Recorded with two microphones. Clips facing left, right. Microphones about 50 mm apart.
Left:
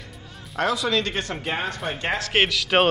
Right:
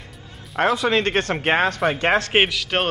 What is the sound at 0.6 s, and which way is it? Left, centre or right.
Speech, right.